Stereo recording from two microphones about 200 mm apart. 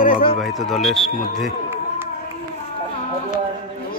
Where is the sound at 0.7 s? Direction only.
Centre (ahead or behind).